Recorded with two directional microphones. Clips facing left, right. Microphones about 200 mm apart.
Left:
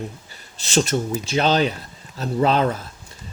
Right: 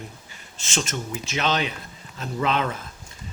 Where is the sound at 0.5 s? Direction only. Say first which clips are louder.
Left 9 dB; 35° left (ahead or behind).